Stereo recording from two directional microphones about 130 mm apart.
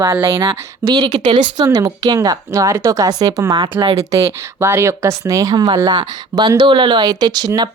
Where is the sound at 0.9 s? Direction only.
35° right (ahead or behind).